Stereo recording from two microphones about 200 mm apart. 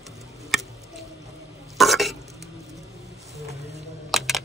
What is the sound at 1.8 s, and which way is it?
Burping, centre (ahead or behind).